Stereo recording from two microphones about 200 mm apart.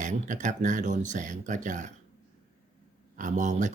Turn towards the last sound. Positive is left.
turn(degrees=-40)  # may be behind; listen again after turning